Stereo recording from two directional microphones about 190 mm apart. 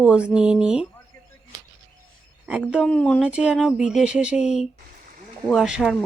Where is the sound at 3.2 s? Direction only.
5° right (ahead or behind).